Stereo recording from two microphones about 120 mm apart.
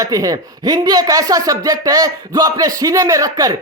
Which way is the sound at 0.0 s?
30° right (ahead or behind).